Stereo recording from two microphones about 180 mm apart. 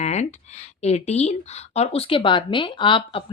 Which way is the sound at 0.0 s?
40° left (ahead or behind).